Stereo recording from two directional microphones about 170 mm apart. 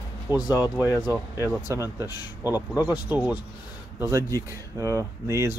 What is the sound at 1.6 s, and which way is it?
Speech, 15° right (ahead or behind).